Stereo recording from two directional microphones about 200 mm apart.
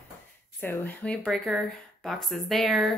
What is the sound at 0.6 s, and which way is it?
Speech, 10° left (ahead or behind).